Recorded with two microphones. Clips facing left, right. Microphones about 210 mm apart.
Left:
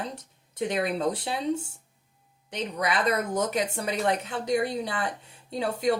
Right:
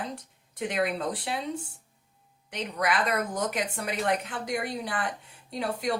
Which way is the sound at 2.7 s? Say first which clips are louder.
Left 1 dB; 25° left (ahead or behind).